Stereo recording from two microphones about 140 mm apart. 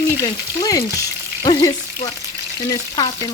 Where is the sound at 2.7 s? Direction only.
30° left (ahead or behind).